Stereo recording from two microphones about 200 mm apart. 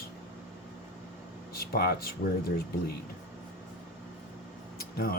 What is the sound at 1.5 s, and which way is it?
Speech, 50° left (ahead or behind).